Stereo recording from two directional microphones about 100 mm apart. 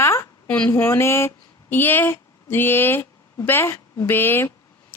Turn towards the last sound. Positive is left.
turn(degrees=20)  # may be behind; listen again after turning